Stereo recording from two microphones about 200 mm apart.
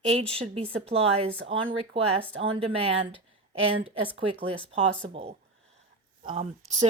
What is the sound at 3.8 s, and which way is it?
A woman's voice, 25° right (ahead or behind).